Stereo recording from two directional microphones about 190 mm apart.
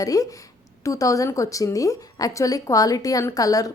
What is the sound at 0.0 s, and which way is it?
A woman's voice, 20° left (ahead or behind).